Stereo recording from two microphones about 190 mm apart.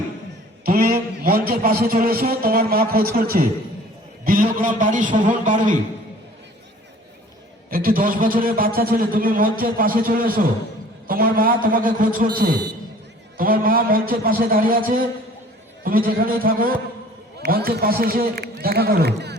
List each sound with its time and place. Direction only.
0.6 s a man's voice: 50° right (ahead or behind)
7.7 s a man's voice: 50° right (ahead or behind)